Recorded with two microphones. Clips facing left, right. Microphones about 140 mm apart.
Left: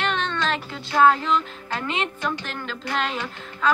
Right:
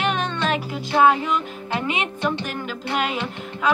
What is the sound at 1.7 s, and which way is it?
Speech, 15° right (ahead or behind).